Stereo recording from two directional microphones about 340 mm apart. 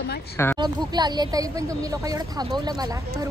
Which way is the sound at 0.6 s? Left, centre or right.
Centre.